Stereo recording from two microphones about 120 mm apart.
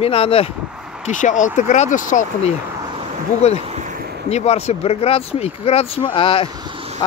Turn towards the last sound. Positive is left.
turn(degrees=45)  # may be behind; listen again after turning